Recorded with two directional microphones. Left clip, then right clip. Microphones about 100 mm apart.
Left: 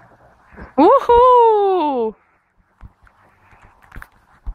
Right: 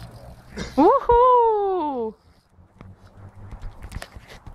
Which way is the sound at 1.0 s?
40° left (ahead or behind).